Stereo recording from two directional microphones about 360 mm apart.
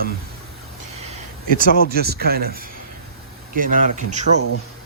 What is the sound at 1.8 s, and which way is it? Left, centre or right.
A man's voice, right.